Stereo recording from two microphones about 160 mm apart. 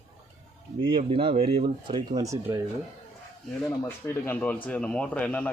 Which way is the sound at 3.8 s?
10° left (ahead or behind).